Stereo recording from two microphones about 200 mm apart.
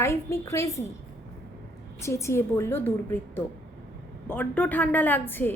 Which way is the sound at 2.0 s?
15° left (ahead or behind).